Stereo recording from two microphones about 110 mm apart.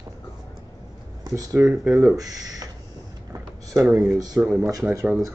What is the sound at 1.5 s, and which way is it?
Speech, 20° right (ahead or behind).